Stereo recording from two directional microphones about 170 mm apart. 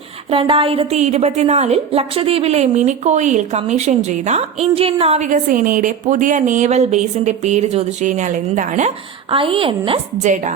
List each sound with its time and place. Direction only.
0.3 s a woman's voice: 30° right (ahead or behind); by 8.9 s 45° right (ahead or behind)
9.3 s a woman's voice: 30° right (ahead or behind)
10.2 s a woman's voice: 45° right (ahead or behind)